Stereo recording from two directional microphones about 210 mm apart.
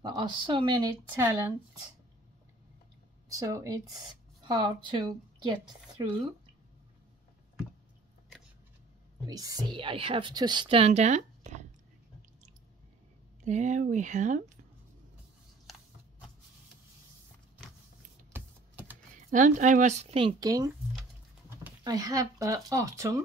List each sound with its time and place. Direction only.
0.0 s a woman's voice: 20° right (ahead or behind)
3.3 s a woman's voice: 15° right (ahead or behind)
9.3 s a woman's voice: 15° right (ahead or behind); by 11.6 s 35° right (ahead or behind)
13.4 s speech: 35° right (ahead or behind)
18.3 s typing: 10° right (ahead or behind)
19.1 s speech: 35° right (ahead or behind); by 20.7 s 15° right (ahead or behind)
21.8 s speech: 15° right (ahead or behind)